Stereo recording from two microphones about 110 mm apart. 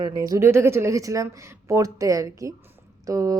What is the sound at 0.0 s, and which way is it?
Speech, 30° right (ahead or behind).